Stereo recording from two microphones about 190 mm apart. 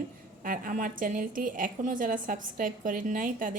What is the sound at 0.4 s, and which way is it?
A woman's voice, 45° right (ahead or behind).